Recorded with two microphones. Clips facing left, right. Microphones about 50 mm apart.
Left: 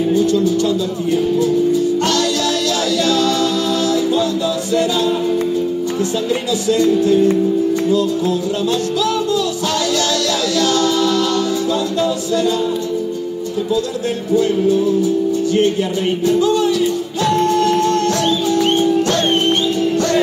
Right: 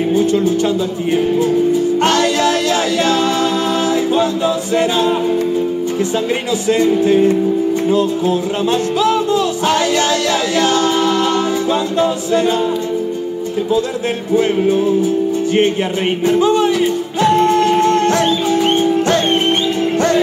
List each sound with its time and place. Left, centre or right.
0.1 s music: right
2.0 s music: right
6.7 s music: right
9.0 s music: right
14.3 s music: right
16.3 s music: right